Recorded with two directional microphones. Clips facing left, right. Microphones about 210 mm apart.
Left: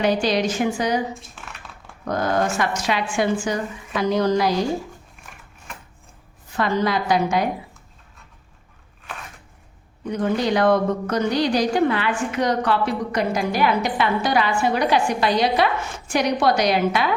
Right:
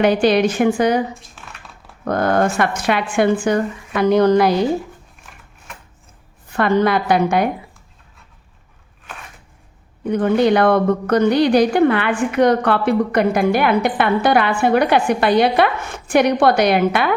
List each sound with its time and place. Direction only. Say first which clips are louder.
0.0 s speech: right 6 dB; 60° right (ahead or behind)
2.0 s speech: right 5 dB; 55° right (ahead or behind)
6.5 s speech: right 5 dB; 60° right (ahead or behind)
10.0 s speech: right 7 dB; 60° right (ahead or behind)